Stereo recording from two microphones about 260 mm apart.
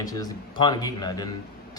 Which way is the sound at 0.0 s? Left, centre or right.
Centre.